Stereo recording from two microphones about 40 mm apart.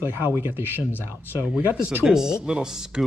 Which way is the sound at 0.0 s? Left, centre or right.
Right.